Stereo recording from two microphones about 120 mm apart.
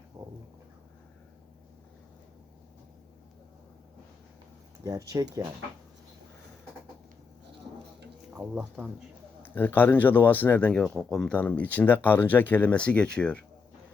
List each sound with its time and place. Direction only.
4.8 s speech: 30° right (ahead or behind)
8.3 s speech: 10° right (ahead or behind)
9.4 s speech: 15° left (ahead or behind)